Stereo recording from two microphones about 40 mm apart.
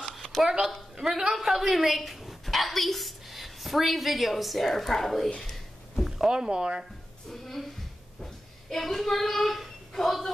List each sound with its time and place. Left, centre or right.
0.4 s speech: centre
6.0 s speech: centre
7.2 s a woman's voice: centre
8.2 s a sound: centre